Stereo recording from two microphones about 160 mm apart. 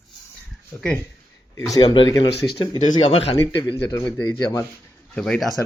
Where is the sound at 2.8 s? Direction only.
45° left (ahead or behind).